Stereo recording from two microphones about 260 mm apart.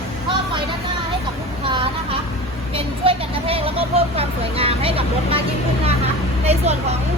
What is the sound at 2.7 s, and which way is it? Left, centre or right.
Vehicle, right.